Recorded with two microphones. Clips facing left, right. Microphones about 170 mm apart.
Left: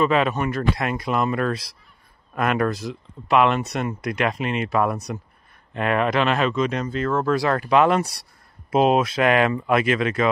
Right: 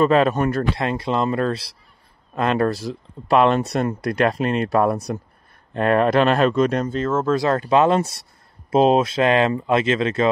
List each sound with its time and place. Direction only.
0.0 s speech: 40° right (ahead or behind)
7.0 s speech: 20° right (ahead or behind)